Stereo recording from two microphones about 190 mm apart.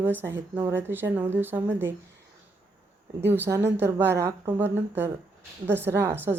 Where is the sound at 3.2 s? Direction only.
10° right (ahead or behind).